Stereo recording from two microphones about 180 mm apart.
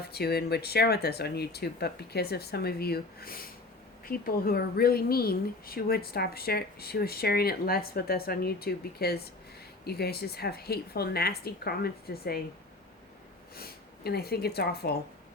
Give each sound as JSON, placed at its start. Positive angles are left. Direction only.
{"t": 0.0, "sound": "speech", "side_deg": 60}
{"t": 13.6, "sound": "speech", "side_deg": 60}